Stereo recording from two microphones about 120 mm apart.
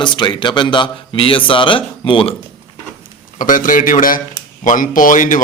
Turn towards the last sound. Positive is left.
turn(degrees=90)